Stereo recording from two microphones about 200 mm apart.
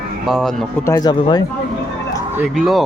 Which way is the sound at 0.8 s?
15° left (ahead or behind).